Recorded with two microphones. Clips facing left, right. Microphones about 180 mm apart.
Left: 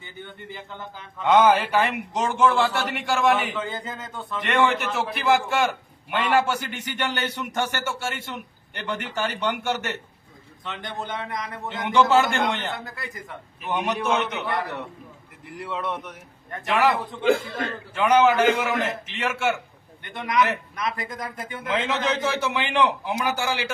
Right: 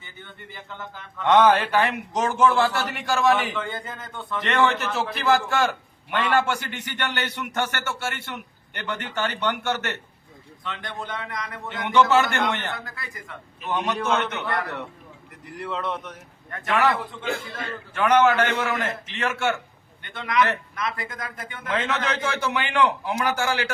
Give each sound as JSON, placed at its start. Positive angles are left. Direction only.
{"t": 0.3, "sound": "a man's voice", "side_deg": 15}
{"t": 4.9, "sound": "a man's voice", "side_deg": 20}
{"t": 5.3, "sound": "a man's voice", "side_deg": 0}
{"t": 13.7, "sound": "a man's voice", "side_deg": 10}
{"t": 15.6, "sound": "a man's voice", "side_deg": 5}
{"t": 16.5, "sound": "a man's voice", "side_deg": 15}